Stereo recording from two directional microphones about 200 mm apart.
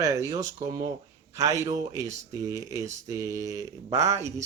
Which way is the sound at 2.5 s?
15° right (ahead or behind).